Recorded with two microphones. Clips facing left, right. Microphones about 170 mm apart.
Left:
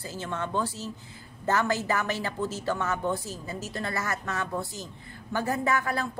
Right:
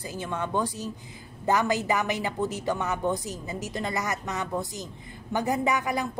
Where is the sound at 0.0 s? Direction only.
15° right (ahead or behind).